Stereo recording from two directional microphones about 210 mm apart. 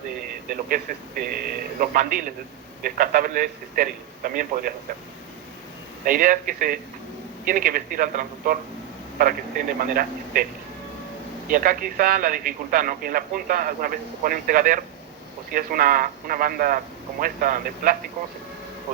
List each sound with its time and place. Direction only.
0.7 s a man's voice: 45° right (ahead or behind)
6.1 s a man's voice: 40° right (ahead or behind)
11.4 s a man's voice: 40° right (ahead or behind)